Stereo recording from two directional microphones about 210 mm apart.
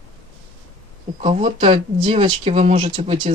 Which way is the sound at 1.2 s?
25° right (ahead or behind).